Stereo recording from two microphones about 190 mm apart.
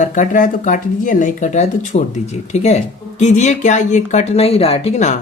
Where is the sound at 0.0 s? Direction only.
40° left (ahead or behind).